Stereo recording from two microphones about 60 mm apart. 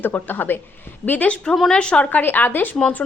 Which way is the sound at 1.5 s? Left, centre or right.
Centre.